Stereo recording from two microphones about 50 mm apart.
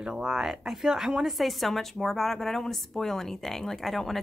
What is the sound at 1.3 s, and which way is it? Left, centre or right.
A woman's voice, centre.